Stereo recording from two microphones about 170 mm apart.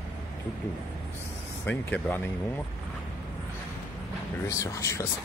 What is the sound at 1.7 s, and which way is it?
Speech, 10° left (ahead or behind).